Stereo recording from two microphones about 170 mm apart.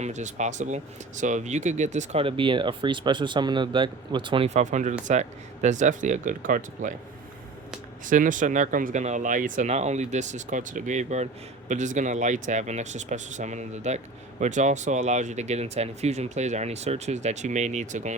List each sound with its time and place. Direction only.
0.0 s speech: 45° right (ahead or behind); by 4.4 s 30° right (ahead or behind)
4.4 s speech: 45° right (ahead or behind)
8.0 s speech: 50° right (ahead or behind)